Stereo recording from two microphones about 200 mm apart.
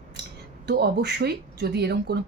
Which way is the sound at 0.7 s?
55° right (ahead or behind).